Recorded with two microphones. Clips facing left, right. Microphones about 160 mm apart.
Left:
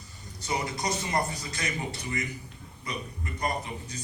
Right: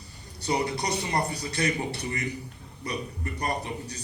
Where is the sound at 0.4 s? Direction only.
35° right (ahead or behind).